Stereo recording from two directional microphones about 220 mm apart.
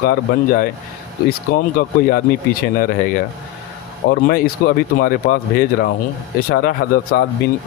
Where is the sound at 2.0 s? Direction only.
45° left (ahead or behind).